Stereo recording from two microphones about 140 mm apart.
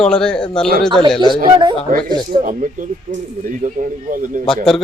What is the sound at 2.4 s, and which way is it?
Speech, 70° right (ahead or behind).